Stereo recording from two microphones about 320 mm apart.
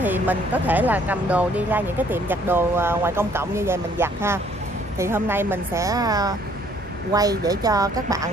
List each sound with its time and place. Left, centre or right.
0.0 s speech: centre